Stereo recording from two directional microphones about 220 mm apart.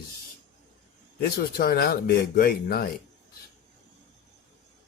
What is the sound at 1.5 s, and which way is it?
Speech, 45° left (ahead or behind).